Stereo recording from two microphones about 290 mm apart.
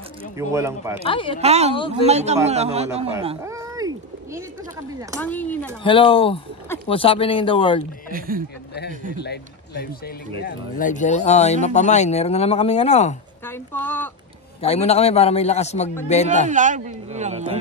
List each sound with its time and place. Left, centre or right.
0.4 s speech: centre
1.0 s speech: centre
1.4 s speech: right
3.4 s cat: centre
5.2 s speech: centre
5.9 s speech: centre
8.1 s speech: right
9.1 s speech: left
13.5 s speech: centre
14.6 s speech: left
16.4 s speech: right